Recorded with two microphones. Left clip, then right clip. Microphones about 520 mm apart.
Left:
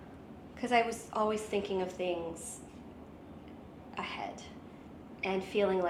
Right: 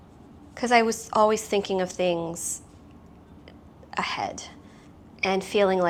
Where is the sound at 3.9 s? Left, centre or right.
Right.